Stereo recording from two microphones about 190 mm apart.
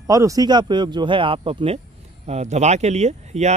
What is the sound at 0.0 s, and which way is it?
Speech, 15° right (ahead or behind).